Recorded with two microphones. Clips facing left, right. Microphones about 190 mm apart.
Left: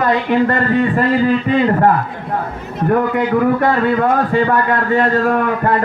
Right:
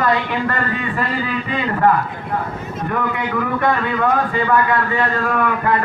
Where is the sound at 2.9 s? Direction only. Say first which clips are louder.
Left 8 dB; 45° left (ahead or behind).